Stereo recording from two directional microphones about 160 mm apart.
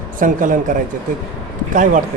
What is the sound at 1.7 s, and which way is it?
Speech, 55° right (ahead or behind).